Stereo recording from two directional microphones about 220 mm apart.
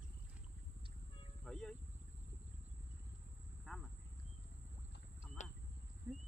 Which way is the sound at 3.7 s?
Centre (ahead or behind).